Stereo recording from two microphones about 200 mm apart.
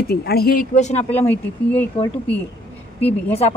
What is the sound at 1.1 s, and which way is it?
Speech, 10° left (ahead or behind).